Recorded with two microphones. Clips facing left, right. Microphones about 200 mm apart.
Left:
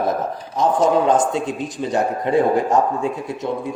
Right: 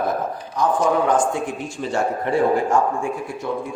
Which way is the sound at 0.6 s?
20° left (ahead or behind).